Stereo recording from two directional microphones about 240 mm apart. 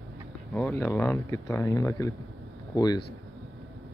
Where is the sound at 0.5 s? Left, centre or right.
Centre.